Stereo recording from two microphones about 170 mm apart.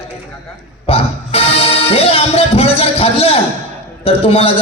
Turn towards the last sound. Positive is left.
turn(degrees=35)  # may be behind; listen again after turning